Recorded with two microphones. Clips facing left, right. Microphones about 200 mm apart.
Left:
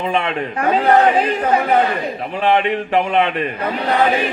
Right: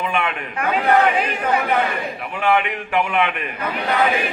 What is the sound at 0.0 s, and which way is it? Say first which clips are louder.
Speech: left 4 dB; 30° left (ahead or behind).